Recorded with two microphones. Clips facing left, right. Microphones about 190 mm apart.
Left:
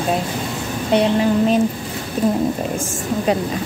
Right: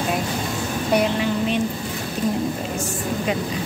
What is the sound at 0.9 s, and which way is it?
Speech, 35° left (ahead or behind).